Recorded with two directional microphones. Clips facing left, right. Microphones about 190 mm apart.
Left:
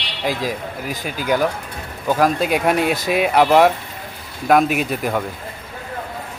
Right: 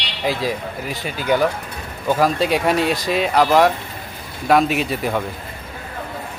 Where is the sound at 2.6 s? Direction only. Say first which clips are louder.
Left 1 dB; centre (ahead or behind).